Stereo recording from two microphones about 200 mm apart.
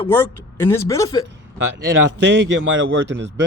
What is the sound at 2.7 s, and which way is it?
Speech, 70° right (ahead or behind).